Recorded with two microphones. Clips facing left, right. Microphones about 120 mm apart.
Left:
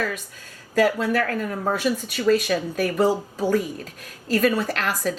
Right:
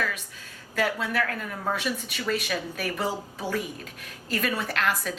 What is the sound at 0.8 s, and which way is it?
A woman's voice, 40° left (ahead or behind).